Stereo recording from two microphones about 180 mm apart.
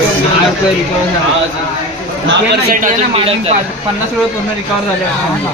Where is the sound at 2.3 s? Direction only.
65° right (ahead or behind).